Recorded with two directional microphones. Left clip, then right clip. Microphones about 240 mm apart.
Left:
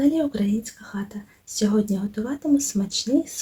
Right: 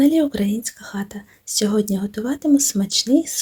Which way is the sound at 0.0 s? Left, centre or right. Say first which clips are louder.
Right 5 dB; right.